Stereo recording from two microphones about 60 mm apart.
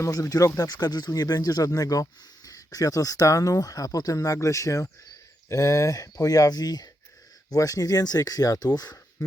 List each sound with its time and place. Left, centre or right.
0.0 s speech: left